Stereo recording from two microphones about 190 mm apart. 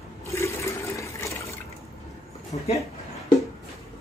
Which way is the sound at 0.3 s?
15° left (ahead or behind).